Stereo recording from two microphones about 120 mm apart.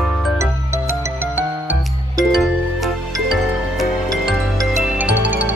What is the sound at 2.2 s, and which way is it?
Music, centre (ahead or behind).